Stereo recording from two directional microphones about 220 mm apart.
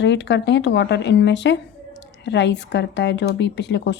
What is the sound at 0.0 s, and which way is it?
A woman's voice, 50° left (ahead or behind).